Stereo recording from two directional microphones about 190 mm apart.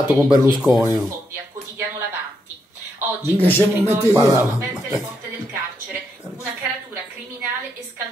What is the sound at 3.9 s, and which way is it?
Speech, 15° right (ahead or behind).